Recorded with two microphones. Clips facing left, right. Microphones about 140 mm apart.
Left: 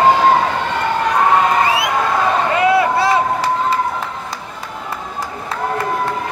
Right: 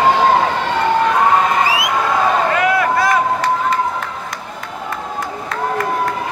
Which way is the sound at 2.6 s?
25° left (ahead or behind).